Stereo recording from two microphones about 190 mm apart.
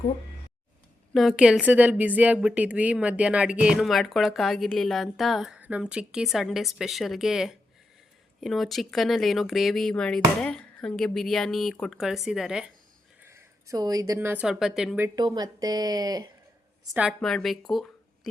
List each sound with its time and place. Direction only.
1.1 s a woman's voice: centre (ahead or behind)
13.2 s speech: 15° right (ahead or behind)
16.9 s a woman's voice: 5° right (ahead or behind)